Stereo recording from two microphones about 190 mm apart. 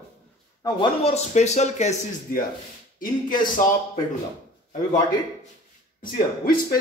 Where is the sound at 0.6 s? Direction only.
30° left (ahead or behind); by 3.5 s 45° left (ahead or behind).